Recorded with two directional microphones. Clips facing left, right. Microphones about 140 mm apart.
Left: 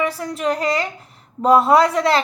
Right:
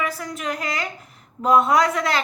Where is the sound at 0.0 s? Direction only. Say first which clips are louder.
Left 6 dB; 30° left (ahead or behind).